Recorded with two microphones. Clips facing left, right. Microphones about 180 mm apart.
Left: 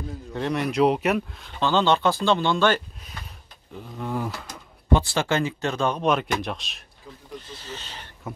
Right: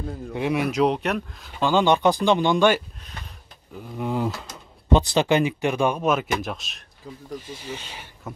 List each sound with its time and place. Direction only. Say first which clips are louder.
0.3 s speech: right 2 dB; 10° right (ahead or behind)
1.6 s speech: right 2 dB; 10° right (ahead or behind)
4.0 s speech: right 4 dB; 20° right (ahead or behind)